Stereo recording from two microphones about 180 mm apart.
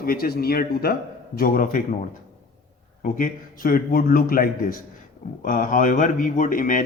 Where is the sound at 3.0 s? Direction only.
50° left (ahead or behind).